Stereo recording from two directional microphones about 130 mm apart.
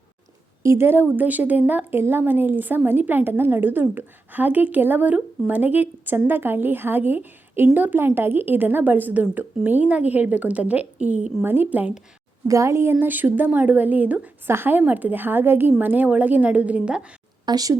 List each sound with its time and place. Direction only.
0.6 s a woman's voice: 20° right (ahead or behind)
12.5 s a woman's voice: 25° right (ahead or behind)
17.4 s speech: 30° right (ahead or behind)